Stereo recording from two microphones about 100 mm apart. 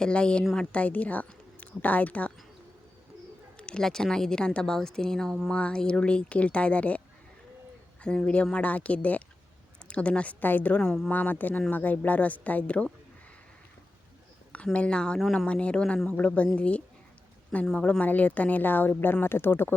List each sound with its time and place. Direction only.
0.0 s speech: 10° left (ahead or behind)
3.6 s a woman's voice: 10° left (ahead or behind)
8.0 s speech: 10° left (ahead or behind)
11.1 s speech: 15° left (ahead or behind)
14.5 s speech: 10° left (ahead or behind)